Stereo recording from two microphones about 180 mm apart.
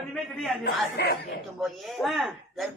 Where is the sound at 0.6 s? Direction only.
65° left (ahead or behind).